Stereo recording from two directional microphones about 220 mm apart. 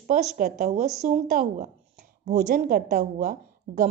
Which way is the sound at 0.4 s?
30° right (ahead or behind).